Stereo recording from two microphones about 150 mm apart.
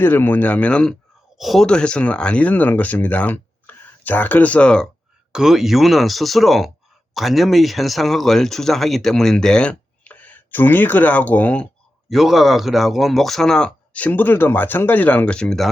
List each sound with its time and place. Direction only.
0.0 s speech: 15° left (ahead or behind)
5.3 s speech: 5° right (ahead or behind)
12.1 s speech: centre (ahead or behind)